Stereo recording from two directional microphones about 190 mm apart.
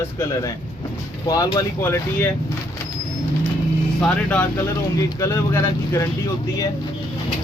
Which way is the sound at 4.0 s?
5° left (ahead or behind).